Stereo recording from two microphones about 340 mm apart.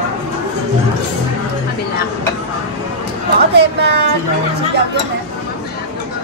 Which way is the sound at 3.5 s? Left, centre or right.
Right.